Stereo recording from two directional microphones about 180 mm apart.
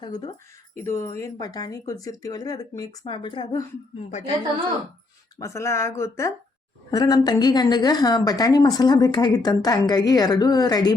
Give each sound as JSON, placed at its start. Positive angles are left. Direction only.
{"t": 0.0, "sound": "a woman's voice", "side_deg": 25}
{"t": 5.4, "sound": "a woman's voice", "side_deg": 15}